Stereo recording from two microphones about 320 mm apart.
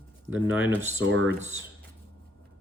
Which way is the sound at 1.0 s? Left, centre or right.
Right.